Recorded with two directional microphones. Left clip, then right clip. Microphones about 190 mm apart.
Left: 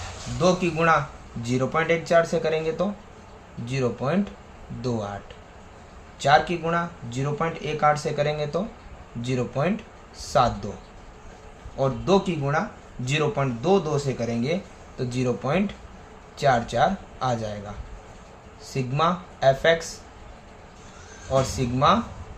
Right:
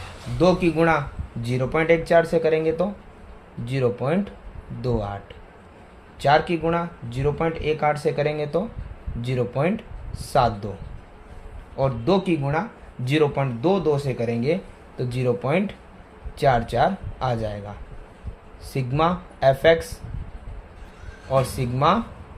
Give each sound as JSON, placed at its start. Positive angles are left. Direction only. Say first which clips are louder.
{"t": 0.4, "sound": "speech", "louder": "right 2 dB", "side_deg": -30}
{"t": 6.1, "sound": "speech", "louder": "right 1 dB", "side_deg": -30}
{"t": 11.8, "sound": "speech", "louder": "even", "side_deg": -30}
{"t": 18.7, "sound": "speech", "louder": "right 1 dB", "side_deg": -30}